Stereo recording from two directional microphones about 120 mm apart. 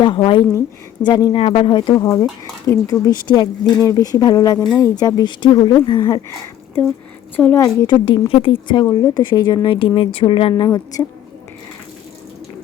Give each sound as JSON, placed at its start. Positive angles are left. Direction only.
{"t": 0.0, "sound": "speech", "side_deg": 45}
{"t": 1.4, "sound": "speech", "side_deg": 50}
{"t": 7.3, "sound": "a woman's voice", "side_deg": 15}
{"t": 7.6, "sound": "a woman's voice", "side_deg": 40}
{"t": 10.6, "sound": "speech", "side_deg": 30}